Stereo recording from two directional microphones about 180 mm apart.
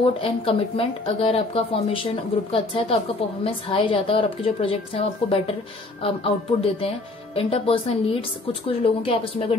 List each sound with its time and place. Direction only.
0.0 s a woman's voice: 30° left (ahead or behind)